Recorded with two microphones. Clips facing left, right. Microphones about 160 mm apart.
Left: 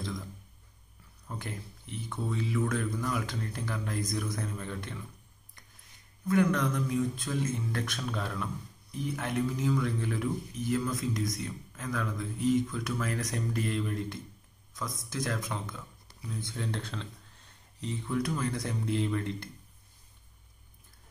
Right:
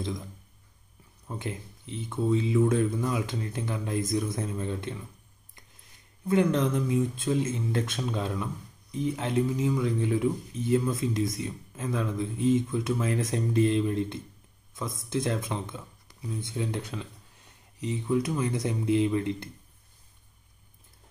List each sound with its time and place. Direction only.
1.2 s speech: 20° right (ahead or behind)
6.2 s speech: 25° right (ahead or behind)